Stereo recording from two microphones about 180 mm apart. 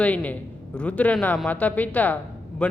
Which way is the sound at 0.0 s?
5° left (ahead or behind).